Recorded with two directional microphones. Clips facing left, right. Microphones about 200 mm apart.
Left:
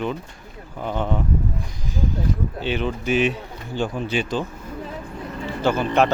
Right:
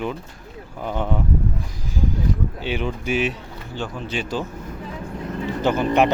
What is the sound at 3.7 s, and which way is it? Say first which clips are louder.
Speech: left 5 dB; 15° left (ahead or behind).